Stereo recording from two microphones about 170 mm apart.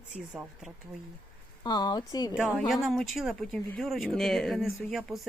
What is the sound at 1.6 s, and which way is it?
Speech, 25° left (ahead or behind).